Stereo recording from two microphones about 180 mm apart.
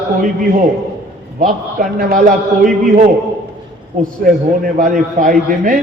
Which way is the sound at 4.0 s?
50° right (ahead or behind).